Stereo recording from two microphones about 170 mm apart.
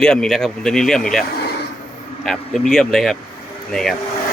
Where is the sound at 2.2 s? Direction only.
Centre (ahead or behind).